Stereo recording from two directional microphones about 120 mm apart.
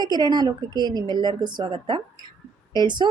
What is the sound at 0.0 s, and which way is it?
Speech, 35° right (ahead or behind).